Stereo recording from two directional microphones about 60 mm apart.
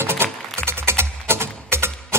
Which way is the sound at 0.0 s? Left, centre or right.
Right.